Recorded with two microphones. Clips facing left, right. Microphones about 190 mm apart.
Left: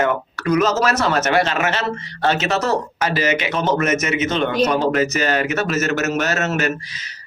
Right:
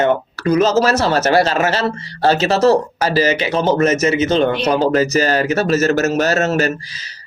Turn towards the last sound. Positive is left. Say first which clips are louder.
# right 2 dB
turn(degrees=-30)  # may be behind; listen again after turning